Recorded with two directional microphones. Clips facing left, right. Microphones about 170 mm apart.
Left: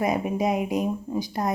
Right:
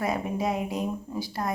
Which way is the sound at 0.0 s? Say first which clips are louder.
Left 4 dB; 15° left (ahead or behind).